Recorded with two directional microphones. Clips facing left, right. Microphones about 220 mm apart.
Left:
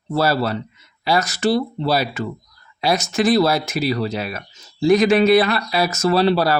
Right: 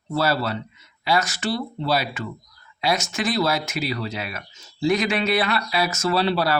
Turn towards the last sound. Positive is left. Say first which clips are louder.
# left 5 dB
turn(degrees=40)  # may be behind; listen again after turning